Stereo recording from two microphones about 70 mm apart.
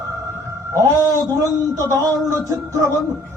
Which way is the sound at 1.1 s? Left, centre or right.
Right.